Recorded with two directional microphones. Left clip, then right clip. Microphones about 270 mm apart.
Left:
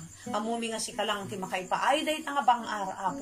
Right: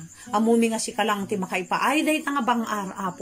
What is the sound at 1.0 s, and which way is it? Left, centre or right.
A woman's voice, right.